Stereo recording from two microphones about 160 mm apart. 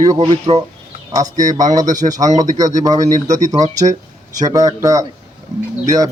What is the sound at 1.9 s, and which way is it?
A man's voice, 20° right (ahead or behind).